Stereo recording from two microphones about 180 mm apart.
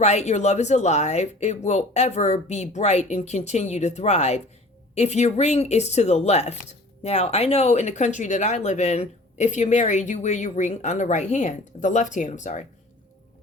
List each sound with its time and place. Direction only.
0.0 s speech: 40° left (ahead or behind)